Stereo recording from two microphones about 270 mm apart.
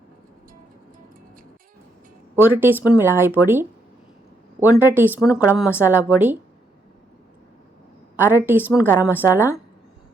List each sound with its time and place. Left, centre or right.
2.3 s speech: centre
8.1 s speech: centre